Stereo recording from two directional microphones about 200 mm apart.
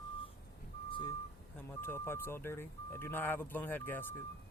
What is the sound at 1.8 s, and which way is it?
Speech, 10° left (ahead or behind).